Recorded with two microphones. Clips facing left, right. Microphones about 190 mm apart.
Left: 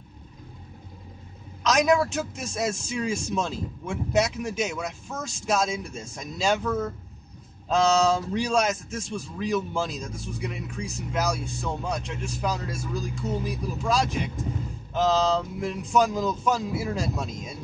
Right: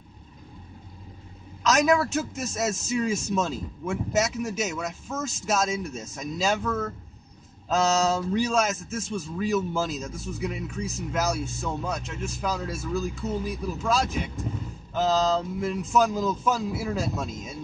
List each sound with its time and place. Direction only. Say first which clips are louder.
1.7 s a man's voice: even; centre (ahead or behind)
6.6 s speech: left 1 dB; 15° left (ahead or behind)
8.4 s a man's voice: even; 5° right (ahead or behind)